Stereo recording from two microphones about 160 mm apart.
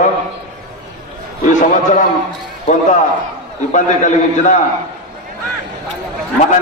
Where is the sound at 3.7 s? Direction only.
50° left (ahead or behind).